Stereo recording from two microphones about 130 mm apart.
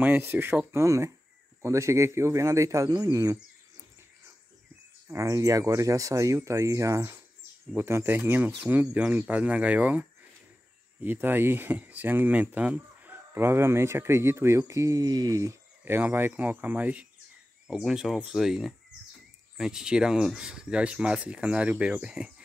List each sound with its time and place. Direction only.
0.0 s speech: 15° right (ahead or behind)
5.1 s speech: 25° right (ahead or behind)
15.8 s speech: 15° right (ahead or behind)